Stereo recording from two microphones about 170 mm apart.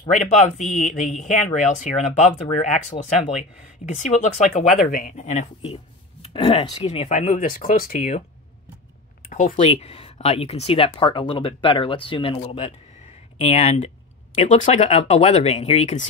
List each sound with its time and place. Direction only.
0.2 s speech: 45° left (ahead or behind)
3.8 s speech: 50° left (ahead or behind)
9.3 s speech: 50° left (ahead or behind)
9.7 s speech: 35° left (ahead or behind)